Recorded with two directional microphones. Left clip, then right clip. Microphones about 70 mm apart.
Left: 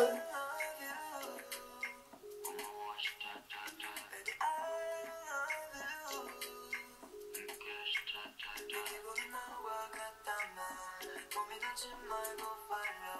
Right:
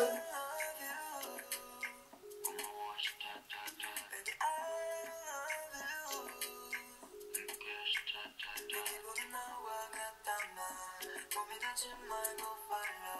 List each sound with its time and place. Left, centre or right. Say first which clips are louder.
0.0 s music: left 2 dB; right